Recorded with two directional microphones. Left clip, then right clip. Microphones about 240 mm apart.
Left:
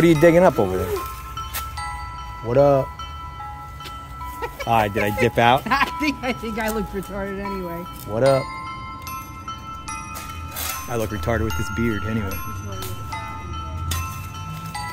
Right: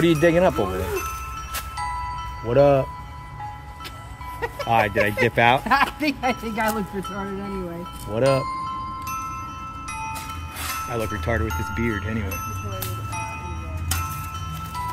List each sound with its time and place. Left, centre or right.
0.0 s speech: left
2.4 s speech: centre
4.6 s speech: centre
5.6 s speech: centre
8.1 s speech: centre
10.9 s speech: left